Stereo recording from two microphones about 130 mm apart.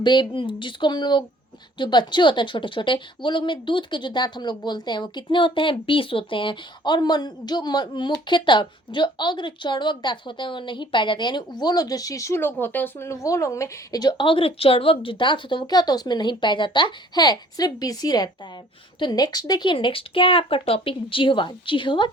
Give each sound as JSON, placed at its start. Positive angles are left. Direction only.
{"t": 0.0, "sound": "a woman's voice", "side_deg": 35}